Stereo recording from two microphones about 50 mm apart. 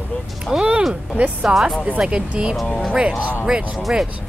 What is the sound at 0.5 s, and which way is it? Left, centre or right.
Speech, centre.